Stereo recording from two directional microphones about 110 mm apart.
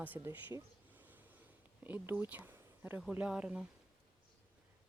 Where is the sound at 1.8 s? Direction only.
15° right (ahead or behind).